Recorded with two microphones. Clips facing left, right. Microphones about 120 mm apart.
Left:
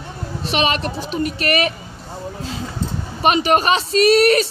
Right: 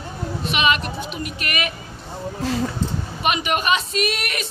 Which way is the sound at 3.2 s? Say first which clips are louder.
Left 7 dB; 35° left (ahead or behind).